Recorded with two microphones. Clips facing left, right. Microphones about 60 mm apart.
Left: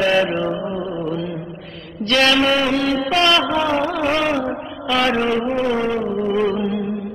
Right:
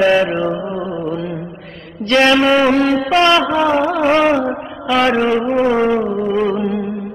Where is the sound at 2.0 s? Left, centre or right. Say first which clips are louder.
Right 4 dB; right.